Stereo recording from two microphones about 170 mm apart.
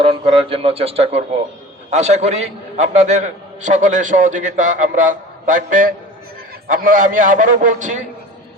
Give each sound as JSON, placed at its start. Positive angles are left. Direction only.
{"t": 0.0, "sound": "a man's voice", "side_deg": -35}